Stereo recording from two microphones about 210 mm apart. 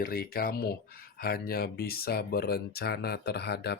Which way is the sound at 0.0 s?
45° left (ahead or behind).